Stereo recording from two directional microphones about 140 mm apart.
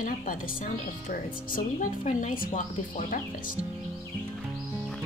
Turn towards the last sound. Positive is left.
turn(degrees=70)  # may be behind; listen again after turning